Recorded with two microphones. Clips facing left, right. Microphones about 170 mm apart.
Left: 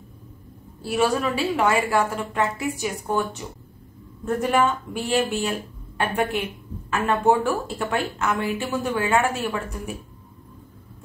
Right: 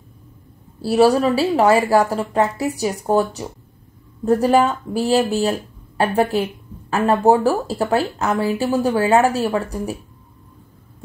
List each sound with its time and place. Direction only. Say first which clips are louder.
0.7 s a woman's voice: right 8 dB; 35° right (ahead or behind)